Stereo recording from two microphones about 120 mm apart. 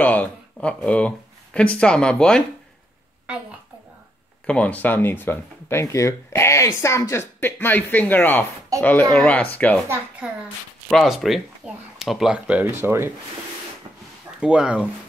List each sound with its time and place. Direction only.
0.0 s speech: 15° left (ahead or behind)
4.5 s speech: 10° left (ahead or behind)
10.2 s speech: 10° right (ahead or behind)
10.9 s speech: centre (ahead or behind); by 13.1 s 20° right (ahead or behind)
14.4 s speech: 10° right (ahead or behind)